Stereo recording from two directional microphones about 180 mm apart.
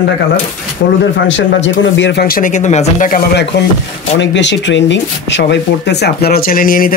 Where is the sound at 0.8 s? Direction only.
90° left; by 3.6 s 60° left (ahead or behind).